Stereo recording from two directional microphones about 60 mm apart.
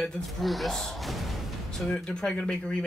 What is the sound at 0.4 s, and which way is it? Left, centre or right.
Speech, centre.